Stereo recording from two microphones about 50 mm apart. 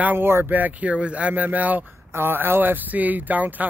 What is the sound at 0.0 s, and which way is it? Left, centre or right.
Speech, right.